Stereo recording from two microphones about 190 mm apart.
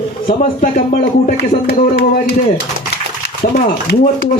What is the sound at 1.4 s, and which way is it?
Speech, 55° left (ahead or behind).